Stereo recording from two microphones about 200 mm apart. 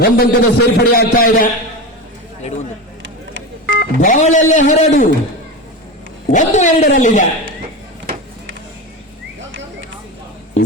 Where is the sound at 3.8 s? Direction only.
40° left (ahead or behind).